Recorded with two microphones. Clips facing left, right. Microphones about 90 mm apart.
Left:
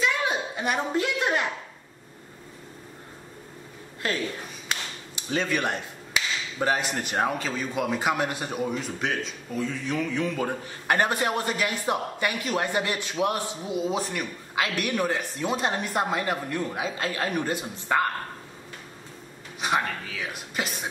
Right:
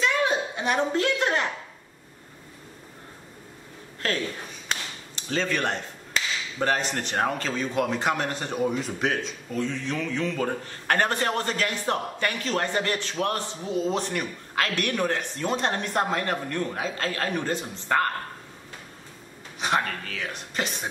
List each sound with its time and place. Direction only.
0.0 s a sound: 5° left (ahead or behind)
4.6 s speech: 10° left (ahead or behind)
19.6 s speech: 5° left (ahead or behind)